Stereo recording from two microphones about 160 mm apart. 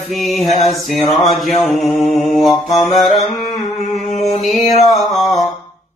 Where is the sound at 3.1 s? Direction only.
45° left (ahead or behind).